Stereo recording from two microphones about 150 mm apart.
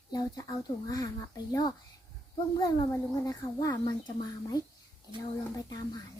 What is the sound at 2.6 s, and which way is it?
A child's voice, 25° left (ahead or behind).